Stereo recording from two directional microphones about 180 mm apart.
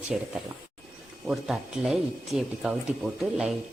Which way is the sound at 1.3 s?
5° right (ahead or behind).